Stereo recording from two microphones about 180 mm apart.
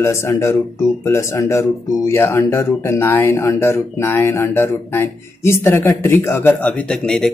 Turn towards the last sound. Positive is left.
turn(degrees=5)  # may be behind; listen again after turning